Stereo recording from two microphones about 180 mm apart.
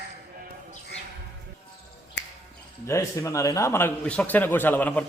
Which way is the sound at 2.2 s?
75° left (ahead or behind).